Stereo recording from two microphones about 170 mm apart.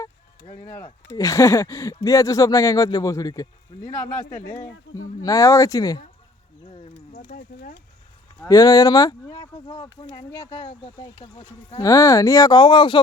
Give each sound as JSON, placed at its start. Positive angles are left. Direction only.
{"t": 1.1, "sound": "speech", "side_deg": 20}
{"t": 5.2, "sound": "speech", "side_deg": 20}
{"t": 6.7, "sound": "a sound", "side_deg": 40}
{"t": 8.4, "sound": "speech", "side_deg": 20}
{"t": 9.3, "sound": "speech", "side_deg": 30}
{"t": 11.1, "sound": "speech", "side_deg": 35}
{"t": 11.8, "sound": "speech", "side_deg": 20}